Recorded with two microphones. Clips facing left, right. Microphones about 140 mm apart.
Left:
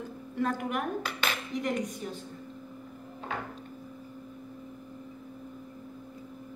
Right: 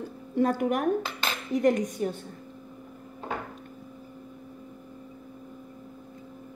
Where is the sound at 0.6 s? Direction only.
45° right (ahead or behind).